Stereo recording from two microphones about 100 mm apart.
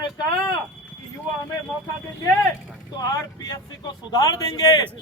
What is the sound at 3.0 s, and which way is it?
Speech, 40° left (ahead or behind).